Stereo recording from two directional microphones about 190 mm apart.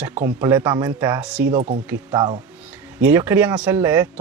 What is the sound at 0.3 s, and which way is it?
Speech, 10° right (ahead or behind).